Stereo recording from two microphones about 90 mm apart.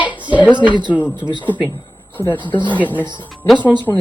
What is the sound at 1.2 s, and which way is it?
Speech, 55° right (ahead or behind).